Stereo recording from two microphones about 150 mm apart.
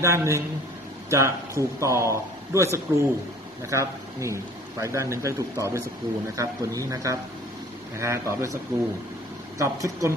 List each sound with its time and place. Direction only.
0.0 s speech: 20° right (ahead or behind)
9.6 s speech: 20° right (ahead or behind)